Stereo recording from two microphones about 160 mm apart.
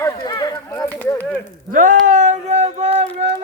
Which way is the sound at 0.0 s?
25° left (ahead or behind).